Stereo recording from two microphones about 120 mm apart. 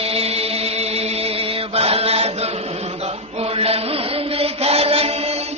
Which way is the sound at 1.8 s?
55° right (ahead or behind).